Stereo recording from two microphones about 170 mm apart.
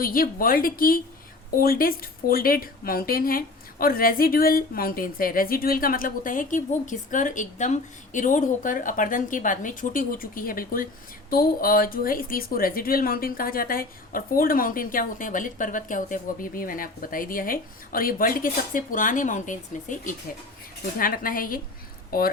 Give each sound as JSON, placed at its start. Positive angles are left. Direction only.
{"t": 0.0, "sound": "a woman's voice", "side_deg": 55}